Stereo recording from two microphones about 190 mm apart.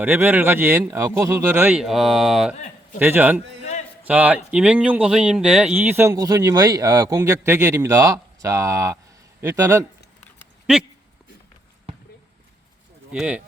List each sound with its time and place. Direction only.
0.0 s a man's voice: 10° right (ahead or behind)
10.7 s speech: 5° right (ahead or behind)
13.1 s speech: 5° right (ahead or behind)